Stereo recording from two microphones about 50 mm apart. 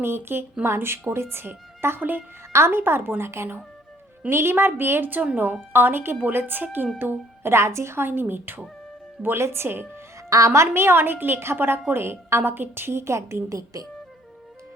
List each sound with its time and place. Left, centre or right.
0.0 s a woman's voice: right
2.0 s a woman's voice: right
2.5 s a woman's voice: right
7.5 s a woman's voice: right
9.2 s a woman's voice: right
10.2 s a woman's voice: right